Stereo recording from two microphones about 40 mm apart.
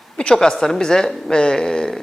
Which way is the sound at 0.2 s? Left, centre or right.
Centre.